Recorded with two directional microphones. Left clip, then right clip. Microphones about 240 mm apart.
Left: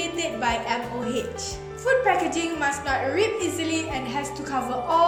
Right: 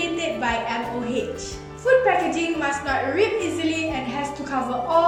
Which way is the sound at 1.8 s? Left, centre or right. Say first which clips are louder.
Right 3 dB; left.